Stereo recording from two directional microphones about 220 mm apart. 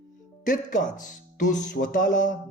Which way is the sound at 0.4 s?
35° left (ahead or behind).